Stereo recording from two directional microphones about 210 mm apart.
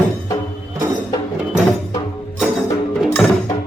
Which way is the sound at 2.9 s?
Centre (ahead or behind).